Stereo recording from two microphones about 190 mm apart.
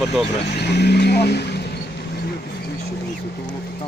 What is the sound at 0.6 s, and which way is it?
Speech, 60° left (ahead or behind).